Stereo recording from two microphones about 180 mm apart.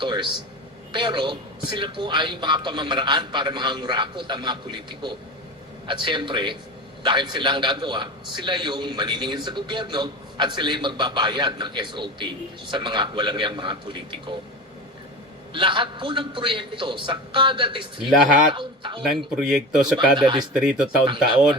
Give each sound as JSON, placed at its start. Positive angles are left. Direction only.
{"t": 0.0, "sound": "a man's voice", "side_deg": -25}
{"t": 15.5, "sound": "a man's voice", "side_deg": -25}
{"t": 19.0, "sound": "speech", "side_deg": 0}
{"t": 20.1, "sound": "a man's voice", "side_deg": -25}
{"t": 20.5, "sound": "speech", "side_deg": -5}